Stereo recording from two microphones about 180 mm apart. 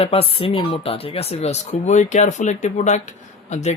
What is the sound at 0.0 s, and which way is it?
Speech, 35° left (ahead or behind).